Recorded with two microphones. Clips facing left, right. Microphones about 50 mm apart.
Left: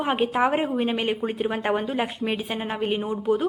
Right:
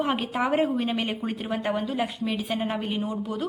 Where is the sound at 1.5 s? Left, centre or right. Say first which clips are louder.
Right 1 dB; left.